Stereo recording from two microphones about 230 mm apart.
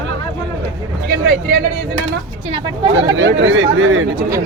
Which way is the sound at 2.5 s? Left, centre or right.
Right.